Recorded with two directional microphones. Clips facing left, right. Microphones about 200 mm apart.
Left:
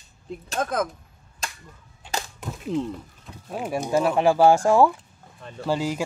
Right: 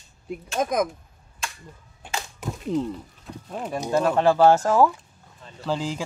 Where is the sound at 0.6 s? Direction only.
15° right (ahead or behind).